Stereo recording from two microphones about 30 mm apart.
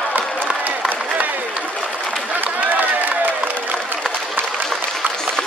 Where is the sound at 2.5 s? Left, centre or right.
Right.